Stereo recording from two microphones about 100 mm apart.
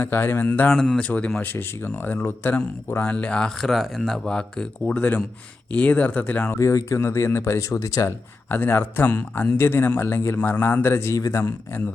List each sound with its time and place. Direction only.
0.0 s speech: 20° left (ahead or behind)
6.6 s speech: 30° left (ahead or behind)
8.4 s speech: 20° left (ahead or behind)